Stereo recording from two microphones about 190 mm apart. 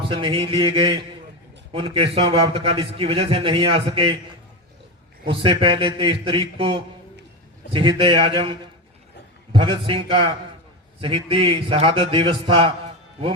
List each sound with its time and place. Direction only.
0.0 s a man's voice: 25° right (ahead or behind)
5.3 s a man's voice: 30° right (ahead or behind)